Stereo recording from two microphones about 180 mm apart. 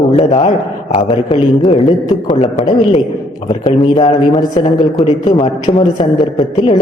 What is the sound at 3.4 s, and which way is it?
Speech, 20° left (ahead or behind).